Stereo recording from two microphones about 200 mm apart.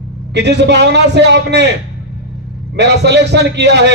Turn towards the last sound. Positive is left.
turn(degrees=-60)  # may be behind; listen again after turning